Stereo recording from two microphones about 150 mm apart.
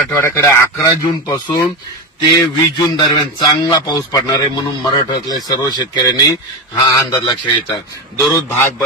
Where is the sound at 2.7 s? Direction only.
30° left (ahead or behind).